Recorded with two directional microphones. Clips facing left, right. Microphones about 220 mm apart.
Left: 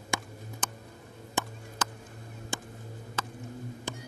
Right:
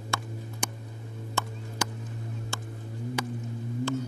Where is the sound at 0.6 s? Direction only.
10° right (ahead or behind).